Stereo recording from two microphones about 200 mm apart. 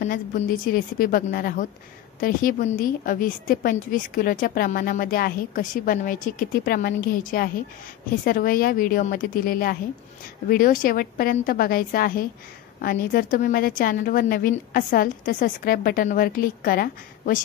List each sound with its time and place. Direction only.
0.0 s a woman's voice: 45° left (ahead or behind)